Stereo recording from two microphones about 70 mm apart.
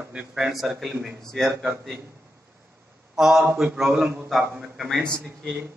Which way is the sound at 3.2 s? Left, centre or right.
Centre.